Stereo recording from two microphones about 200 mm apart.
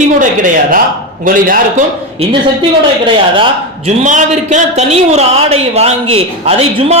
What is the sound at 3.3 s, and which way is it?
A man's voice, 30° right (ahead or behind).